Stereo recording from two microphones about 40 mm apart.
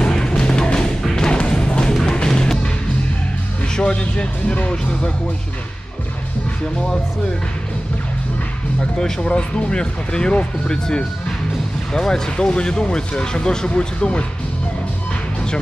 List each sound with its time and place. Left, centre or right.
0.0 s music: left
3.8 s speech: left
9.2 s speech: left